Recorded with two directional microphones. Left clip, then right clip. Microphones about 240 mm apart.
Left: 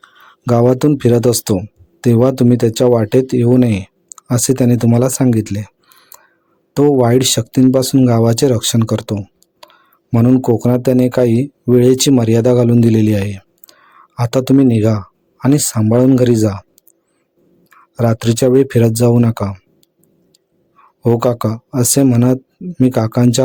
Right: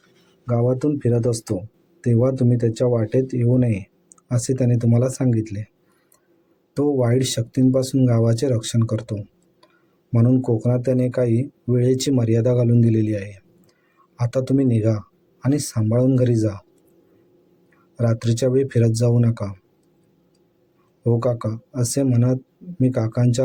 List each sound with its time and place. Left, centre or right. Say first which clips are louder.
0.4 s speech: left 9 dB; left
17.9 s speech: left 8 dB; left
21.0 s speech: left 8 dB; left